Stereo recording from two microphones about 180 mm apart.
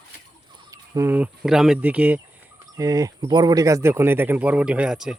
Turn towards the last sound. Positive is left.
turn(degrees=-5)  # may be behind; listen again after turning